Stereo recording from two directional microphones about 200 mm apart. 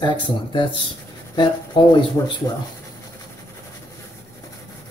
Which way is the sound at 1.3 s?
20° left (ahead or behind).